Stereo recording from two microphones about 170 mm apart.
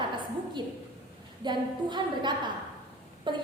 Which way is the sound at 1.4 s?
25° right (ahead or behind).